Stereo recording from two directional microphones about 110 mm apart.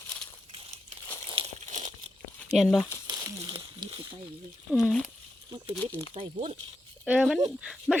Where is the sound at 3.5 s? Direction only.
50° right (ahead or behind).